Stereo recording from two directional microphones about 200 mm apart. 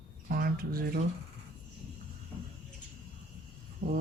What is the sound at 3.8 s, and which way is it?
Speech, 50° right (ahead or behind).